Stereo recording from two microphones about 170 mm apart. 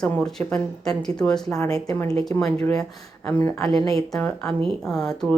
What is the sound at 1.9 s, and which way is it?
Speech, 20° left (ahead or behind).